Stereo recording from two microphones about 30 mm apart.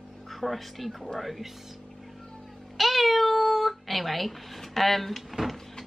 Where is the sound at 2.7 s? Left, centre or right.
Centre.